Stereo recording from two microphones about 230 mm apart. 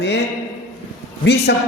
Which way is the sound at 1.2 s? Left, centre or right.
Left.